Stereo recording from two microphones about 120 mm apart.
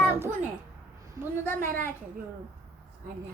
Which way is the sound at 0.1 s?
20° right (ahead or behind).